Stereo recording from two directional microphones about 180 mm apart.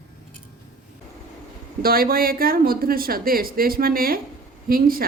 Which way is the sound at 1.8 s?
55° right (ahead or behind).